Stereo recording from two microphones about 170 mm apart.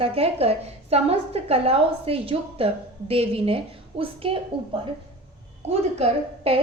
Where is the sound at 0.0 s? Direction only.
35° right (ahead or behind).